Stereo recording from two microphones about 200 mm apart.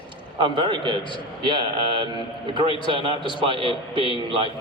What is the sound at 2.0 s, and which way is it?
A man's voice, 25° right (ahead or behind).